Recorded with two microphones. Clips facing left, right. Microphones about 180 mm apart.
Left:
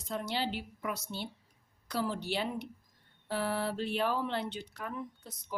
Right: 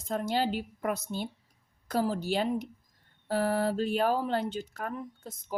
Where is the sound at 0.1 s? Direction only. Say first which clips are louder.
Right 6 dB; 45° right (ahead or behind).